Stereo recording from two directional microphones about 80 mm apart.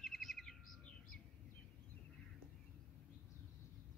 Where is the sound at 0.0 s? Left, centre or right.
Centre.